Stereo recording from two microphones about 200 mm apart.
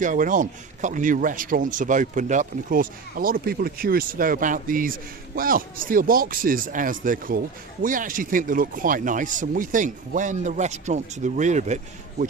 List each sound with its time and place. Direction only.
0.0 s speech: 40° right (ahead or behind)